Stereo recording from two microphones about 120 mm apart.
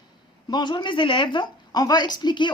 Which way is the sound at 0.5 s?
40° left (ahead or behind).